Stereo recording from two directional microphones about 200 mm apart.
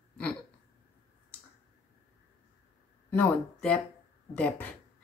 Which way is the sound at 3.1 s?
5° left (ahead or behind).